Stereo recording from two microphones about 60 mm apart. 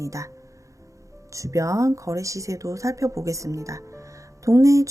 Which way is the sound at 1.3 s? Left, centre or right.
Right.